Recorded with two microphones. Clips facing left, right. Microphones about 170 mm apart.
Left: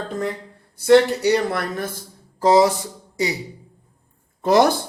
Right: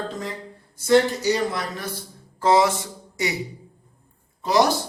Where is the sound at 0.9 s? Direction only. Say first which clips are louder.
Left 4 dB; 65° left (ahead or behind).